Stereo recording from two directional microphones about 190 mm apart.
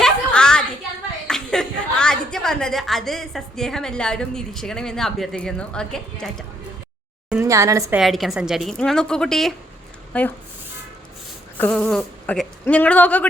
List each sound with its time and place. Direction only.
0.0 s a sound: 5° left (ahead or behind)
1.3 s a woman's voice: 5° left (ahead or behind)
7.4 s a woman's voice: 15° right (ahead or behind)
7.9 s a woman's voice: centre (ahead or behind)
11.5 s speech: 10° left (ahead or behind)